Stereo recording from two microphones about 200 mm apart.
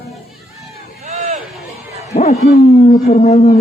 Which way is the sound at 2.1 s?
35° left (ahead or behind).